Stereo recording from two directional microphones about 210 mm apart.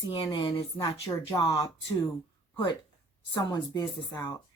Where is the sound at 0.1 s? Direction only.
25° left (ahead or behind).